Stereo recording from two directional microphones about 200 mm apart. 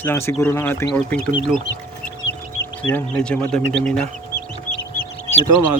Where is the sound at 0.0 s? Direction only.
10° left (ahead or behind).